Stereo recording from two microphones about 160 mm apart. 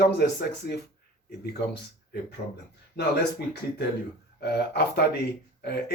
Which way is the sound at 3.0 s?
90° left.